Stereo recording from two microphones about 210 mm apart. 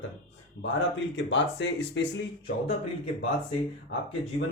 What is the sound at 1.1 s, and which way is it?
Speech, 60° left (ahead or behind).